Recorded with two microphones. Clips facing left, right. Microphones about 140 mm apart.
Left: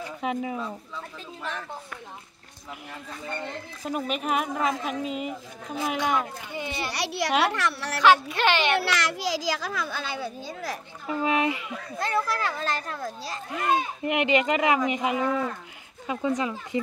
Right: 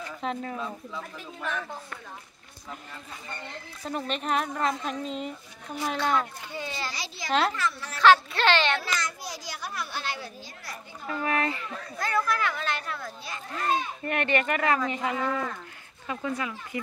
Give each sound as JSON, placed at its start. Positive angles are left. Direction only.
{"t": 0.0, "sound": "speech", "side_deg": 10}
{"t": 0.7, "sound": "speech", "side_deg": -5}
{"t": 3.8, "sound": "speech", "side_deg": 10}
{"t": 6.9, "sound": "speech", "side_deg": 70}
{"t": 8.0, "sound": "speech", "side_deg": 15}
{"t": 8.7, "sound": "a child's voice", "side_deg": 80}
{"t": 11.1, "sound": "speech", "side_deg": 15}
{"t": 12.0, "sound": "a child's voice", "side_deg": 25}
{"t": 13.5, "sound": "speech", "side_deg": 15}